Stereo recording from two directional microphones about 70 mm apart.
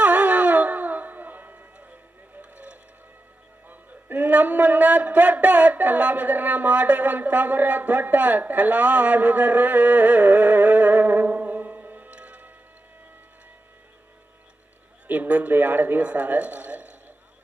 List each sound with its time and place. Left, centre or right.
0.0 s a sound: centre
2.4 s vehicle: centre
3.7 s a man's voice: right
15.0 s speech: right